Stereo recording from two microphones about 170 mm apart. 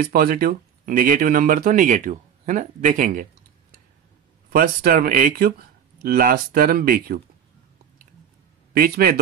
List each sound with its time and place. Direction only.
0.0 s speech: 60° right (ahead or behind)
4.5 s speech: 55° right (ahead or behind)
8.7 s speech: 60° right (ahead or behind)